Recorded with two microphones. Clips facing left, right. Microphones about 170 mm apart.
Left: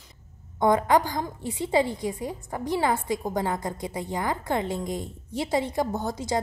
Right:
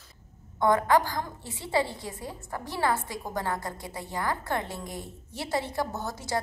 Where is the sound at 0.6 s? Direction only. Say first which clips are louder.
Left 2 dB; 20° left (ahead or behind).